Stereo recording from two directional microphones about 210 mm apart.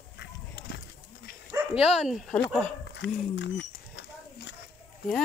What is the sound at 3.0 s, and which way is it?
Speech, 60° left (ahead or behind).